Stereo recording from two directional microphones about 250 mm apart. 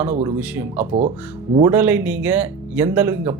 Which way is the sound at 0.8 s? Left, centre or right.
Right.